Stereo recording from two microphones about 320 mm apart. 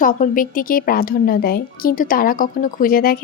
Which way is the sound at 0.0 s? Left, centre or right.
Left.